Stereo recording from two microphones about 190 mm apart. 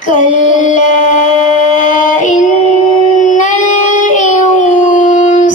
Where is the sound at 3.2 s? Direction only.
40° left (ahead or behind).